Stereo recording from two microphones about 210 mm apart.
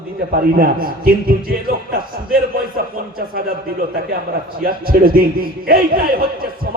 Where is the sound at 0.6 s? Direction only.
45° right (ahead or behind).